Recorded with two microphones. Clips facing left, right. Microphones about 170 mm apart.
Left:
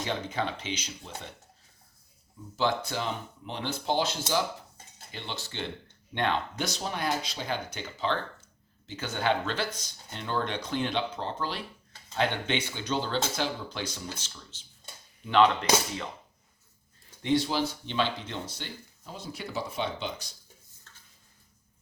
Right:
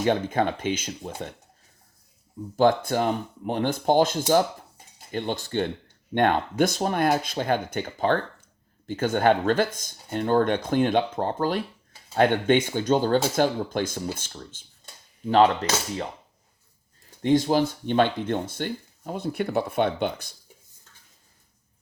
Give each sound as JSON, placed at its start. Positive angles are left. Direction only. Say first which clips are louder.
{"t": 0.0, "sound": "speech", "louder": "right 9 dB", "side_deg": -50}
{"t": 2.6, "sound": "speech", "louder": "right 9 dB", "side_deg": -50}
{"t": 15.2, "sound": "speech", "louder": "right 4 dB", "side_deg": -40}
{"t": 17.2, "sound": "speech", "louder": "right 6 dB", "side_deg": -45}